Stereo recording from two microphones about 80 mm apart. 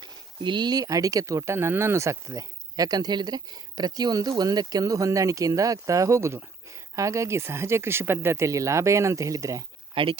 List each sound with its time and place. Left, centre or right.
0.0 s speech: right
9.9 s speech: right